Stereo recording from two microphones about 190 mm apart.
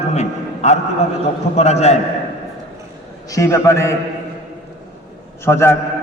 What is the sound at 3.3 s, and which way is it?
Speech, 15° left (ahead or behind).